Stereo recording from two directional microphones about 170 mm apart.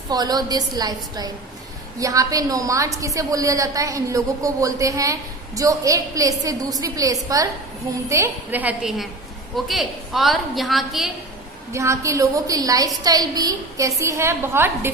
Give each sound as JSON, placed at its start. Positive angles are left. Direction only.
{"t": 0.1, "sound": "a woman's voice", "side_deg": -25}
{"t": 11.7, "sound": "a woman's voice", "side_deg": -15}